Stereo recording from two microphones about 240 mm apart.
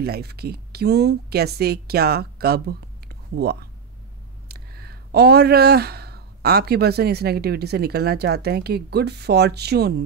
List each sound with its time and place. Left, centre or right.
0.0 s a woman's voice: right